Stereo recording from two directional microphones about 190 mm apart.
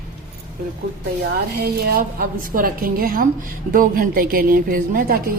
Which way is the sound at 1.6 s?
55° right (ahead or behind).